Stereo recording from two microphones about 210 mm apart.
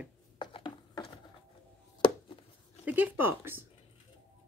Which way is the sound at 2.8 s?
10° right (ahead or behind).